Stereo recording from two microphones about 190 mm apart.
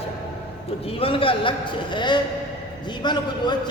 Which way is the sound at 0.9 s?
30° left (ahead or behind).